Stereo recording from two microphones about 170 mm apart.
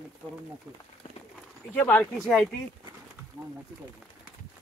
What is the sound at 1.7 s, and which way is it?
Speech, 10° left (ahead or behind).